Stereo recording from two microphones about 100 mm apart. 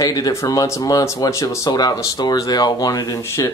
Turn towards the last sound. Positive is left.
turn(degrees=40)  # may be behind; listen again after turning